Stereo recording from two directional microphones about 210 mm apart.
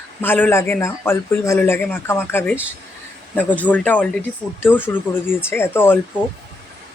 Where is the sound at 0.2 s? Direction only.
10° left (ahead or behind).